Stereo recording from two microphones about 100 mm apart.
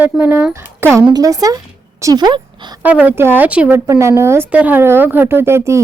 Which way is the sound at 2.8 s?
15° right (ahead or behind).